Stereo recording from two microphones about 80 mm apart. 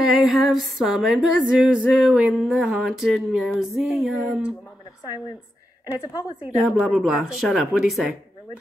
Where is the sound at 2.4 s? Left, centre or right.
Centre.